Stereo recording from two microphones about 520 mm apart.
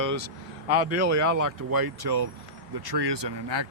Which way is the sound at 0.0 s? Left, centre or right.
Right.